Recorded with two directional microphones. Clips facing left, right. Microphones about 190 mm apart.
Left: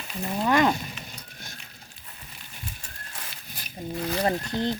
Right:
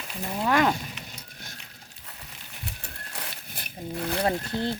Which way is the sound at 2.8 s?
60° right (ahead or behind).